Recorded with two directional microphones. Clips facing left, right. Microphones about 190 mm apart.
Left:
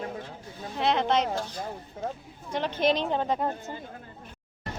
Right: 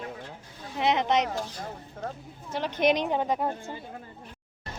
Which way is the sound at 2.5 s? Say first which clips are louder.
Right 1 dB; 10° right (ahead or behind).